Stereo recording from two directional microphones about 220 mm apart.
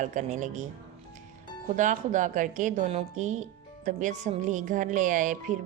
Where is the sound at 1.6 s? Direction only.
35° right (ahead or behind).